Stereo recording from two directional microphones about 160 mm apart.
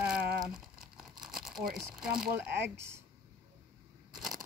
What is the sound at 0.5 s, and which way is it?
Crumpling, 5° right (ahead or behind).